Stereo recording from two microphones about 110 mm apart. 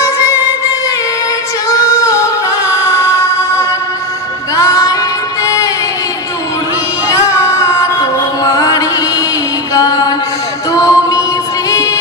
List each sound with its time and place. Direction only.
0.0 s music: 30° left (ahead or behind)
1.7 s female singing: 30° left (ahead or behind)
4.6 s music: 30° left (ahead or behind)
7.1 s female singing: 30° left (ahead or behind)
9.8 s music: 35° left (ahead or behind)